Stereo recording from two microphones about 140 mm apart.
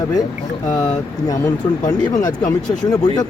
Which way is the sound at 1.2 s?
25° left (ahead or behind).